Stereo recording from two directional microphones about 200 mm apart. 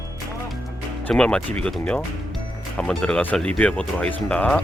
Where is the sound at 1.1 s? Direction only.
5° left (ahead or behind).